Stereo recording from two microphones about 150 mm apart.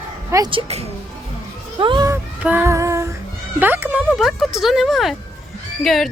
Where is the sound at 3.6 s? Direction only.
15° right (ahead or behind).